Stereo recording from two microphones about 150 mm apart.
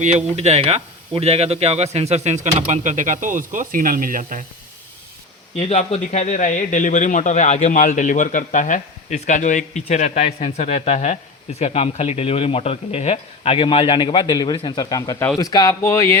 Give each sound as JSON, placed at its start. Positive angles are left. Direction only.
{"t": 0.3, "sound": "a man's voice", "side_deg": -45}
{"t": 5.5, "sound": "a man's voice", "side_deg": 45}